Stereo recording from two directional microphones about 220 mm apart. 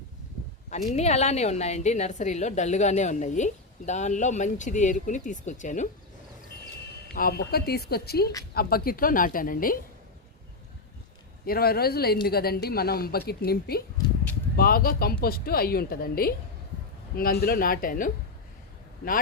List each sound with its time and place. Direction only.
0.9 s a woman's voice: 30° left (ahead or behind)
7.1 s a woman's voice: 45° left (ahead or behind)
11.4 s a woman's voice: 45° left (ahead or behind)